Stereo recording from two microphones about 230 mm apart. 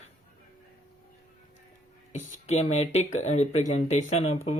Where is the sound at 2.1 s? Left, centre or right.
Left.